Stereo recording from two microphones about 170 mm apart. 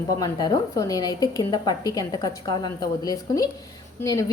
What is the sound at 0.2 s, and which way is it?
A woman's voice, 25° left (ahead or behind).